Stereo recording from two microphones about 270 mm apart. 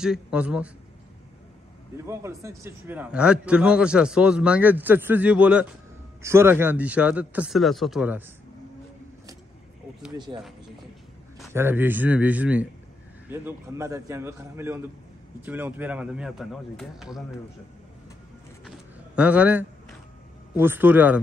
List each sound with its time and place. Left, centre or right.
0.0 s a man's voice: centre
2.0 s a man's voice: centre
10.1 s a man's voice: centre
19.1 s a man's voice: centre